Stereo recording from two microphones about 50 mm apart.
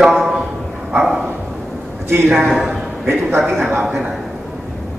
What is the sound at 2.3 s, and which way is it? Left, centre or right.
Speech, right.